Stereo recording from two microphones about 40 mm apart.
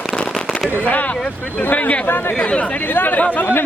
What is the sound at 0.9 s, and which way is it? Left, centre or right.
Speech, left.